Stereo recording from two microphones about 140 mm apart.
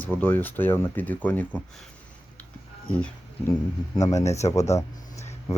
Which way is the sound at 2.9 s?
10° left (ahead or behind).